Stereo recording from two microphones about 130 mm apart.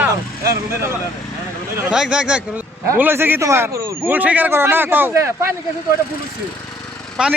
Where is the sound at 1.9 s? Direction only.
5° right (ahead or behind).